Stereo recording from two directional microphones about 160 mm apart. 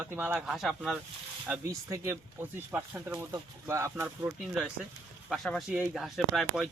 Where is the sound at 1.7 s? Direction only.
15° right (ahead or behind).